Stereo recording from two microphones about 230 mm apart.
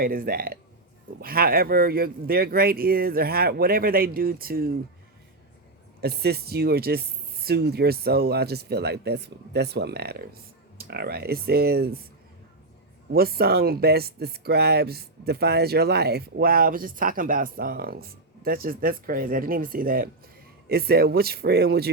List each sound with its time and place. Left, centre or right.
0.0 s speech: right
6.0 s speech: right
13.1 s speech: right